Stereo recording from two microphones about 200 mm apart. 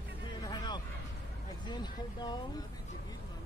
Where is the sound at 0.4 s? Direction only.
20° left (ahead or behind).